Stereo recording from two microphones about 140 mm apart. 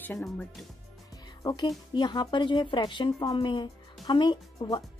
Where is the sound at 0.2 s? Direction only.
5° left (ahead or behind).